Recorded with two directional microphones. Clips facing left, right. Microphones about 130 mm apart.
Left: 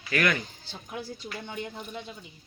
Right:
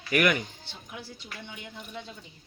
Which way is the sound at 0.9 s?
45° left (ahead or behind).